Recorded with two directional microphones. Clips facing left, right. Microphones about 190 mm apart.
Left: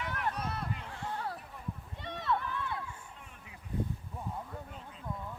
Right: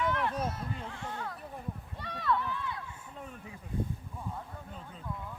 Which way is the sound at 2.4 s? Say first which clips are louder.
Right 1 dB; 55° left (ahead or behind).